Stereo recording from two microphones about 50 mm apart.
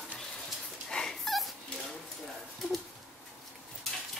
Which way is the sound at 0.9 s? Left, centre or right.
Centre.